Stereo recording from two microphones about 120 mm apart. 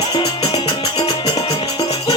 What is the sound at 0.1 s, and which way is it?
Music, 30° left (ahead or behind).